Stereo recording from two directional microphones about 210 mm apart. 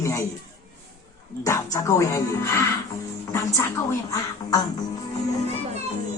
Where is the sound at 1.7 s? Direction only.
15° left (ahead or behind).